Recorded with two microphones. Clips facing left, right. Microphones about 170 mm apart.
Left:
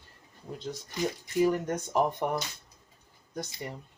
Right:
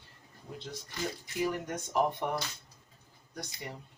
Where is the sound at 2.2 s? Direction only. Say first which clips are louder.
Left 3 dB; 45° left (ahead or behind).